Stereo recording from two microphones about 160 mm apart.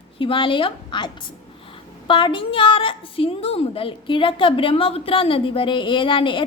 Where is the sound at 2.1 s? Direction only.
30° left (ahead or behind).